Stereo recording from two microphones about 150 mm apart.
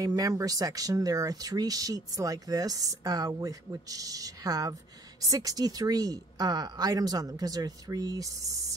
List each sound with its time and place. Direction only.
0.0 s speech: 20° right (ahead or behind)